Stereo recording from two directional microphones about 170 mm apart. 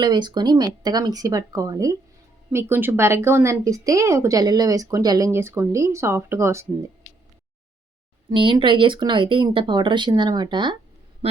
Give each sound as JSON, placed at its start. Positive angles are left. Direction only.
{"t": 0.0, "sound": "a woman's voice", "side_deg": -25}
{"t": 8.3, "sound": "speech", "side_deg": -30}